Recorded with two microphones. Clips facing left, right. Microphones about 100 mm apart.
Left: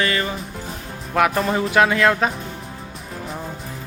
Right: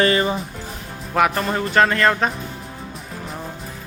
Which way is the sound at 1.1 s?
Centre (ahead or behind).